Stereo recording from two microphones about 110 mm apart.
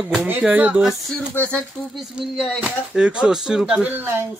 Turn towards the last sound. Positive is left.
turn(degrees=-5)  # may be behind; listen again after turning